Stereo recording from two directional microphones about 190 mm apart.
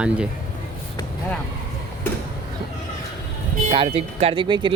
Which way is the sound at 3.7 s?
30° right (ahead or behind).